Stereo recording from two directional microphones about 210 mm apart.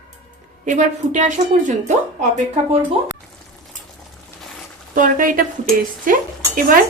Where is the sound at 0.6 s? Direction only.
35° right (ahead or behind).